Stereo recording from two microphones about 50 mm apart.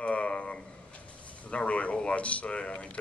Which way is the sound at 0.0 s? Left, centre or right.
Left.